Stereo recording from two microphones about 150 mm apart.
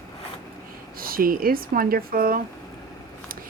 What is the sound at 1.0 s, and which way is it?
Speech, 75° right (ahead or behind).